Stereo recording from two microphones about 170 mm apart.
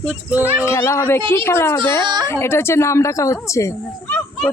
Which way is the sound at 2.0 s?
25° right (ahead or behind).